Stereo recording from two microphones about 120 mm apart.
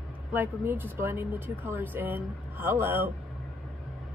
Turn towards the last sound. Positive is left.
turn(degrees=-20)  # may be behind; listen again after turning